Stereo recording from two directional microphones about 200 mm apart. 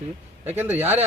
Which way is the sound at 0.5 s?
10° right (ahead or behind).